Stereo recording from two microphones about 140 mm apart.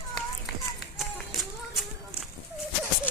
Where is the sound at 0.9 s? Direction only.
Centre (ahead or behind).